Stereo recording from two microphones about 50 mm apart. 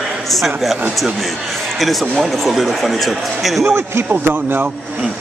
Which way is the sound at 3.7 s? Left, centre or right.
Right.